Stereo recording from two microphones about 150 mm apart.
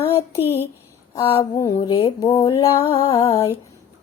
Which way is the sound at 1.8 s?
35° left (ahead or behind).